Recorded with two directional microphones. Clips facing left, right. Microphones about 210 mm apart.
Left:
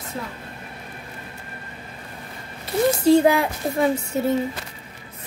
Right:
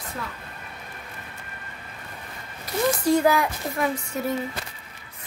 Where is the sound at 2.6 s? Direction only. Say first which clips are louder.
Left 5 dB; 25° left (ahead or behind).